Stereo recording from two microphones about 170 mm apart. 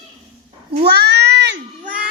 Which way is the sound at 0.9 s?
80° right.